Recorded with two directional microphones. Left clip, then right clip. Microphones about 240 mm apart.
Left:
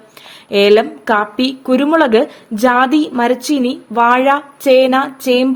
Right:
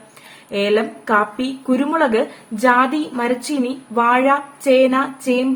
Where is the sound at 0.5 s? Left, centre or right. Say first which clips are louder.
Left 8 dB; left.